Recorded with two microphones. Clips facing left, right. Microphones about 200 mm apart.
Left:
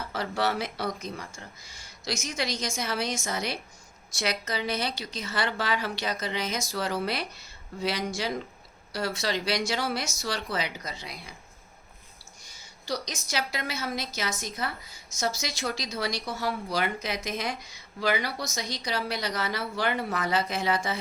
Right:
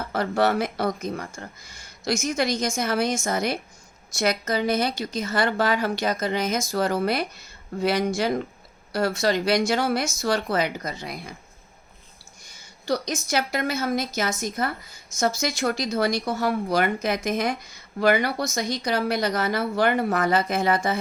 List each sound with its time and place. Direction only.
0.0 s speech: 50° right (ahead or behind)
12.4 s a woman's voice: 55° right (ahead or behind)